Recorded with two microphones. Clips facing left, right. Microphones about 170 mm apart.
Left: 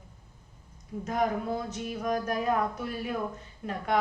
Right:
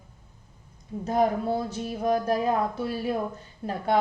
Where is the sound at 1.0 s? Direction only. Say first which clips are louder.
Right 5 dB; 30° right (ahead or behind).